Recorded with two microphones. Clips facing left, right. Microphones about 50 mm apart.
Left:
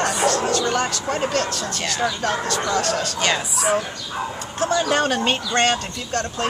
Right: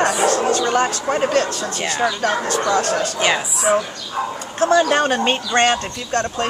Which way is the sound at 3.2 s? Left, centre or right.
Centre.